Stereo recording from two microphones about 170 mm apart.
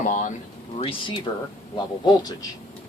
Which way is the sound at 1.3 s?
30° left (ahead or behind).